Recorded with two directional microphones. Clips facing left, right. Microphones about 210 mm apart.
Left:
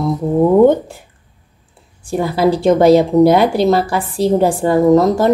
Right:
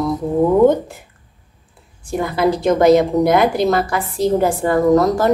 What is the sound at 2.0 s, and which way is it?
A woman's voice, 30° left (ahead or behind).